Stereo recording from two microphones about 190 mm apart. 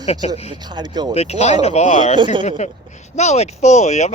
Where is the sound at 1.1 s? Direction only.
35° left (ahead or behind).